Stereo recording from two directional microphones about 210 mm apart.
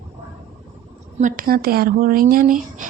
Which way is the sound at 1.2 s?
40° right (ahead or behind).